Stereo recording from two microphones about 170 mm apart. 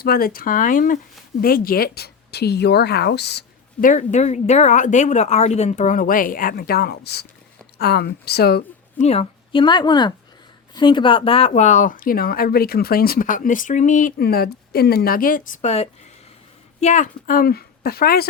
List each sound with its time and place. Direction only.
0.0 s a woman's voice: 60° left (ahead or behind); by 3.4 s 75° left (ahead or behind)
3.8 s a woman's voice: 50° left (ahead or behind); by 8.6 s 70° left (ahead or behind)
9.0 s a woman's voice: 40° left (ahead or behind); by 18.3 s 65° left (ahead or behind)